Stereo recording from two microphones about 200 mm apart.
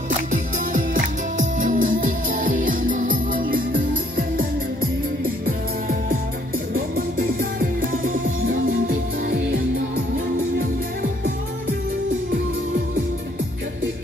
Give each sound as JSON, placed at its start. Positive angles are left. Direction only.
{"t": 0.3, "sound": "music", "side_deg": -40}